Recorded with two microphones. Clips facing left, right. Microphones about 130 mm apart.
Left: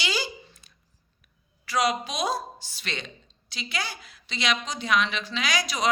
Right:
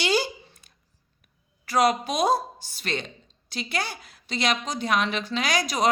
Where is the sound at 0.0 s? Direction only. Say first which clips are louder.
Right 6 dB; 55° right (ahead or behind).